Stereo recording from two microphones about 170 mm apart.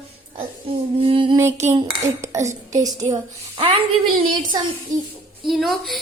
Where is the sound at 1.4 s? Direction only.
15° right (ahead or behind).